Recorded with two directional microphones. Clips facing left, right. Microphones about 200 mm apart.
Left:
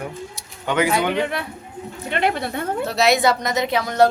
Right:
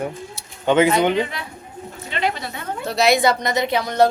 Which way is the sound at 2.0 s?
55° left (ahead or behind).